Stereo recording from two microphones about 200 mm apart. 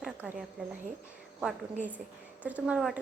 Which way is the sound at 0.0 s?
5° right (ahead or behind).